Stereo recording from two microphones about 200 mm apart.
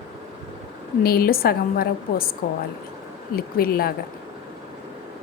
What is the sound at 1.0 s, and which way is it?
A woman's voice, 50° left (ahead or behind).